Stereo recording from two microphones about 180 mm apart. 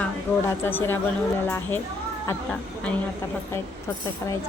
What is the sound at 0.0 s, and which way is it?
Speech, 10° left (ahead or behind).